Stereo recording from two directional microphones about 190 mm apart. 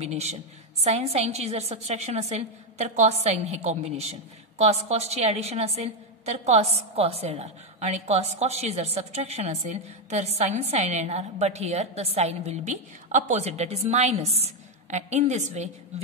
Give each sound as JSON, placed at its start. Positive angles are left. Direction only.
{"t": 0.0, "sound": "a woman's voice", "side_deg": -35}